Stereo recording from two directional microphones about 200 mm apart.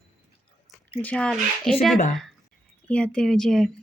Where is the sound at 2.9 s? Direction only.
5° left (ahead or behind).